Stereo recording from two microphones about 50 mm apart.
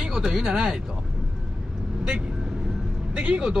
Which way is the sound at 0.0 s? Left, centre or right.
Centre.